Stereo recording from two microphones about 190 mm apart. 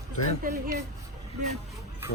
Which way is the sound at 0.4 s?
50° right (ahead or behind).